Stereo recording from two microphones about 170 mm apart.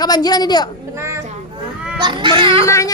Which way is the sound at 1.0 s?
15° right (ahead or behind).